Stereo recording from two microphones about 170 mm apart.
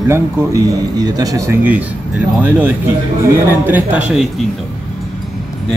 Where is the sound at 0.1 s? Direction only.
15° right (ahead or behind).